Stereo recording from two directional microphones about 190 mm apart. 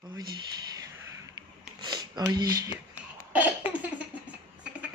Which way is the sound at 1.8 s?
20° right (ahead or behind).